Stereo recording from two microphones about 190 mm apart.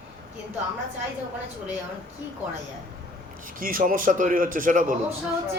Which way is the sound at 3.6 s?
45° right (ahead or behind).